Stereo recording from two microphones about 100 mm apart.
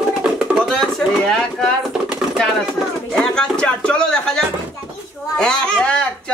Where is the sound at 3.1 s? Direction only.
10° left (ahead or behind).